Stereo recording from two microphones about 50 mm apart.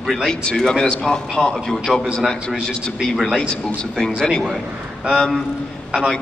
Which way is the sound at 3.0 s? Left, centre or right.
Centre.